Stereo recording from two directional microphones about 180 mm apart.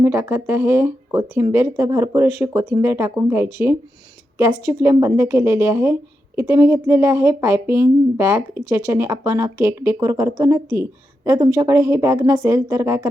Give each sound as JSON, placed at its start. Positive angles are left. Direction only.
{"t": 0.0, "sound": "a woman's voice", "side_deg": -15}